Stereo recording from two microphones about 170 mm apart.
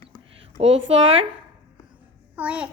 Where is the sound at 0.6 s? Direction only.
30° right (ahead or behind).